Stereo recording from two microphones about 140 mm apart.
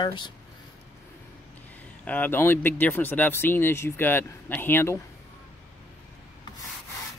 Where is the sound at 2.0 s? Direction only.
10° left (ahead or behind).